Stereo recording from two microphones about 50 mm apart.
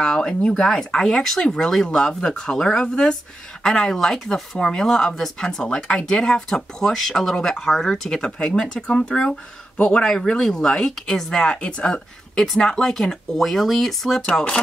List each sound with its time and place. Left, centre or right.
0.0 s speech: centre
12.4 s speech: centre